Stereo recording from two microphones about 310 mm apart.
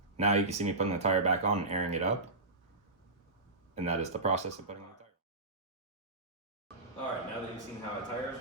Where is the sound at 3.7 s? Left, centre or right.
Right.